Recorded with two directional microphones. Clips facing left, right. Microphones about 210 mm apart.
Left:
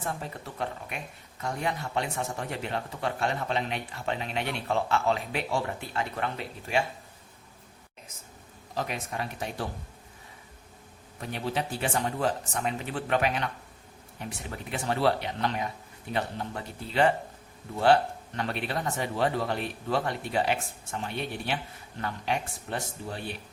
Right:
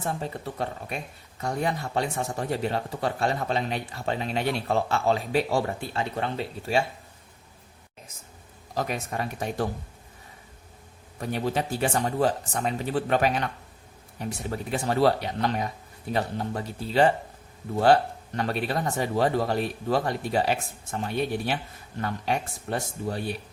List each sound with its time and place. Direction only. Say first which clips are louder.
0.0 s speech: right 4 dB; 30° right (ahead or behind)
8.7 s speech: right 4 dB; 45° right (ahead or behind)
11.2 s speech: right 4 dB; 45° right (ahead or behind)
18.3 s speech: right 4 dB; 40° right (ahead or behind)